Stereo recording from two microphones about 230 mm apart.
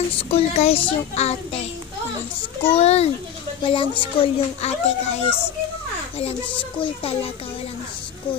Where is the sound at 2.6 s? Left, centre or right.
Left.